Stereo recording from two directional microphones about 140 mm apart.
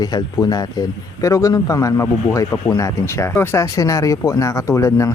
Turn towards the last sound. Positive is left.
turn(degrees=20)  # may be behind; listen again after turning